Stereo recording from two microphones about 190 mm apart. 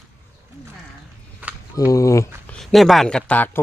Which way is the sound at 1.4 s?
10° right (ahead or behind).